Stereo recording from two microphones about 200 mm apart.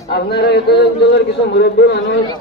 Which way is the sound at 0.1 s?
55° left (ahead or behind).